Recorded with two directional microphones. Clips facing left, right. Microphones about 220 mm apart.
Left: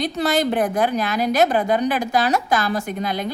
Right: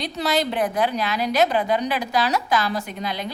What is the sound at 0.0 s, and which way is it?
A woman's voice, 50° left (ahead or behind).